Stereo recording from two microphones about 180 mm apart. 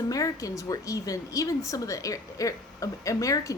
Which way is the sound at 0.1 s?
20° left (ahead or behind).